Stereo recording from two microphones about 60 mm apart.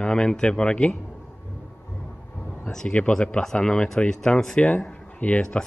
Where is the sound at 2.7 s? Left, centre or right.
Centre.